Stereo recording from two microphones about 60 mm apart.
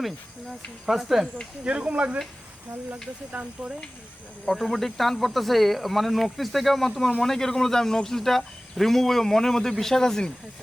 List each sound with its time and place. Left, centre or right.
0.9 s speech: centre
1.6 s speech: centre
3.3 s speech: centre
4.4 s speech: centre